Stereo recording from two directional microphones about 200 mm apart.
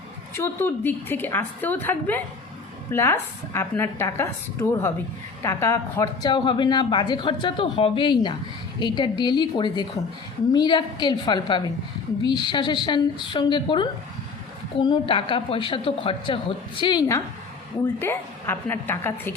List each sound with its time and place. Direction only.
0.3 s a woman's voice: 10° left (ahead or behind)